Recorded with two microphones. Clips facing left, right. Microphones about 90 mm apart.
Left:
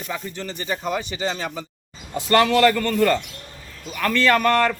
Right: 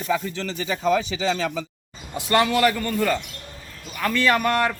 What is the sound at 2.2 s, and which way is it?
A man's voice, 15° right (ahead or behind).